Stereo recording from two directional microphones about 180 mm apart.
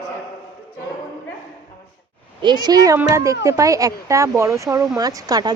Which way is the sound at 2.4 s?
25° right (ahead or behind).